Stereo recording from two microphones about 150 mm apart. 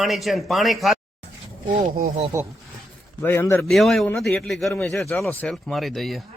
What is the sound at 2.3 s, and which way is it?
Speech, 20° right (ahead or behind).